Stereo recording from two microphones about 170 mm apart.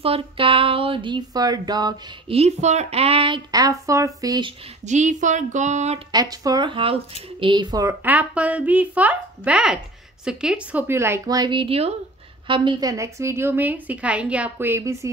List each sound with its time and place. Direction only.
0.0 s a sound: 35° right (ahead or behind)
2.3 s a sound: 40° right (ahead or behind)
3.5 s speech: 20° right (ahead or behind)
4.8 s speech: 45° right (ahead or behind)
6.1 s speech: 20° right (ahead or behind)
8.0 s a woman's voice: 10° right (ahead or behind)